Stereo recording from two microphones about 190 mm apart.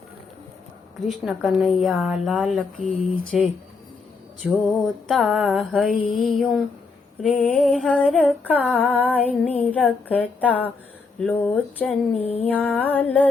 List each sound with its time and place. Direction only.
1.0 s a woman's voice: centre (ahead or behind)
4.4 s a woman's voice: centre (ahead or behind)
12.2 s a sound: 30° left (ahead or behind)
12.5 s a woman's voice: 10° left (ahead or behind)